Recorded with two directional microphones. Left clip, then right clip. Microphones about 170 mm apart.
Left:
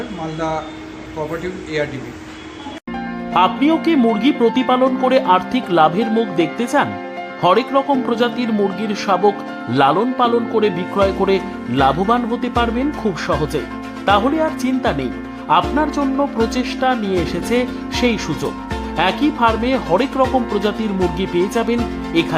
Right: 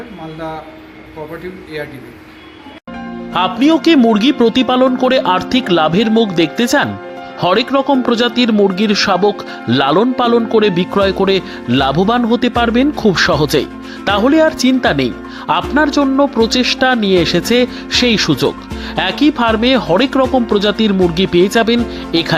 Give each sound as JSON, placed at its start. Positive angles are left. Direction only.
{"t": 3.3, "sound": "speech", "side_deg": -25}